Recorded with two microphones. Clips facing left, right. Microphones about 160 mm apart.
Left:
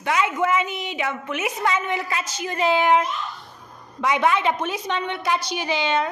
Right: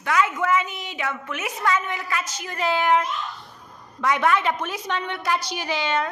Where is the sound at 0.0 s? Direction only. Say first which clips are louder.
Left 1 dB; 20° left (ahead or behind).